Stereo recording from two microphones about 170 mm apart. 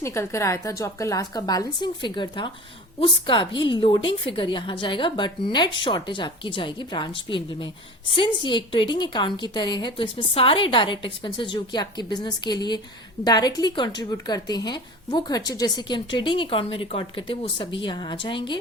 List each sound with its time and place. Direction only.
0.0 s a woman's voice: 15° left (ahead or behind)